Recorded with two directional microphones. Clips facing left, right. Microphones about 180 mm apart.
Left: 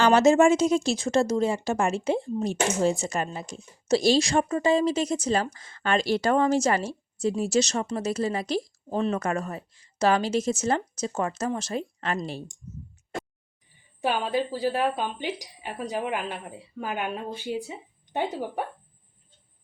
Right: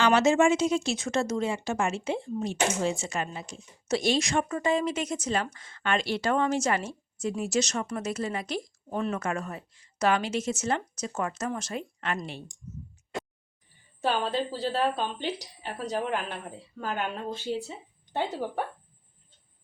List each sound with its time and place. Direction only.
0.0 s speech: 40° left (ahead or behind)
14.0 s speech: 10° left (ahead or behind)